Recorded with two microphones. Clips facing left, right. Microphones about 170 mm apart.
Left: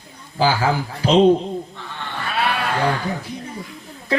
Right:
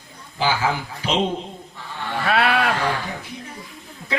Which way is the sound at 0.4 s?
40° left (ahead or behind).